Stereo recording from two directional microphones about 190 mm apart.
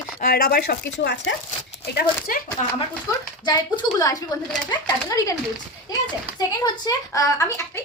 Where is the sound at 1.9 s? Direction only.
50° left (ahead or behind).